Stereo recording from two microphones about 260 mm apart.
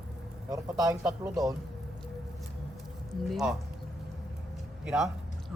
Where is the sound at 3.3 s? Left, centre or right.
Centre.